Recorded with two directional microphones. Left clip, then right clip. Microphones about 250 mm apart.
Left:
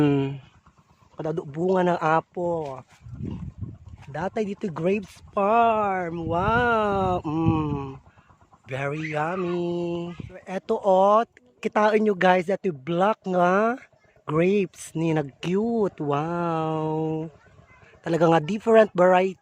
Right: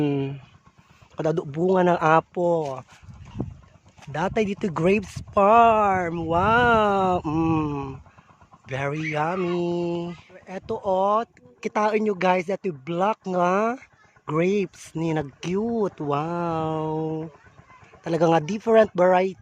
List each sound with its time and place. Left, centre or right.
0.0 s a sound: centre
1.1 s speech: centre
4.0 s speech: centre
10.3 s speech: centre